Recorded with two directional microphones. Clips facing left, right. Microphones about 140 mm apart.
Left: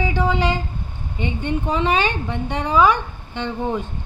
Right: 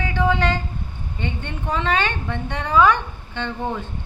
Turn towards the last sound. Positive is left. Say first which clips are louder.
# left 3 dB
turn(degrees=15)  # may be behind; listen again after turning